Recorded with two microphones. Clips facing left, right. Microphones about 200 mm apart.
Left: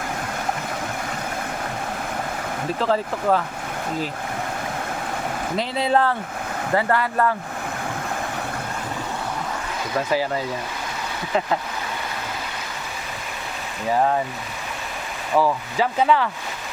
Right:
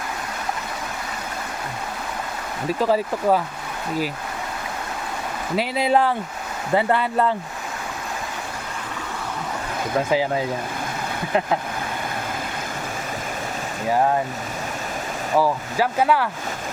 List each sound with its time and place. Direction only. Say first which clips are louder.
2.8 s speech: right 2 dB; 10° right (ahead or behind)
5.5 s speech: right 2 dB; 10° right (ahead or behind)
10.1 s speech: right 1 dB; 15° right (ahead or behind)
15.4 s speech: even; 10° right (ahead or behind)